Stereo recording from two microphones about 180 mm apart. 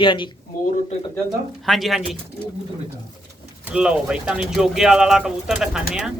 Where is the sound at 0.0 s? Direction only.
25° left (ahead or behind).